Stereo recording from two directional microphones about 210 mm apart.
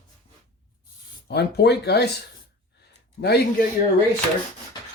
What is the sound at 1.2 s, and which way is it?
Speech, 50° left (ahead or behind).